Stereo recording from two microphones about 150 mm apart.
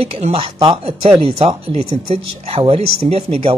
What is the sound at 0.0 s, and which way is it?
Speech, 40° right (ahead or behind).